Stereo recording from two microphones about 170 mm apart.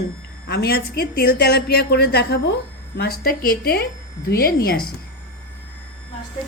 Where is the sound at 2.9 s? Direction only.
60° left (ahead or behind).